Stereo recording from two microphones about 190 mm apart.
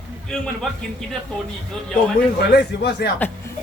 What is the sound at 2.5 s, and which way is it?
Speech, 60° left (ahead or behind).